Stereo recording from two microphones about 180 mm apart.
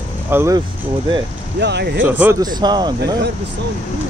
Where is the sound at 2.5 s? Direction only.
25° right (ahead or behind).